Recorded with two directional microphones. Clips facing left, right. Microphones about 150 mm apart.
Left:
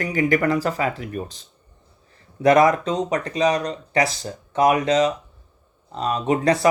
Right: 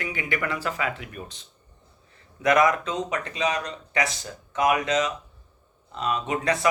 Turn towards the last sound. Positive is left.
turn(degrees=35)  # may be behind; listen again after turning